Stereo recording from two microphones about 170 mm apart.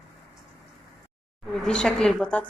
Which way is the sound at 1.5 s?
5° left (ahead or behind).